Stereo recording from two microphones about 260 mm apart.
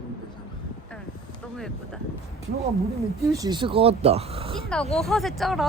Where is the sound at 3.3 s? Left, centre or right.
Centre.